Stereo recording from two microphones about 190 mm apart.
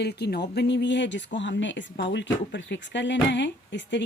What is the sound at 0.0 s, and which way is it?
Speech, 60° left (ahead or behind).